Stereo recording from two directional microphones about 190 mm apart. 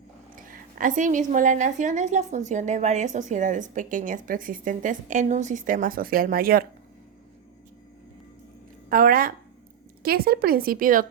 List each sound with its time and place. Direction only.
0.3 s a woman's voice: 45° right (ahead or behind)
8.9 s a woman's voice: 50° right (ahead or behind)